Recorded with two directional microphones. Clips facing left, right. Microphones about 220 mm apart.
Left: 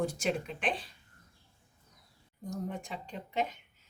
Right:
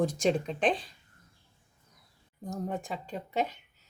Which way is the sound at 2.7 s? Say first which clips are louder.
Right 5 dB; 40° right (ahead or behind).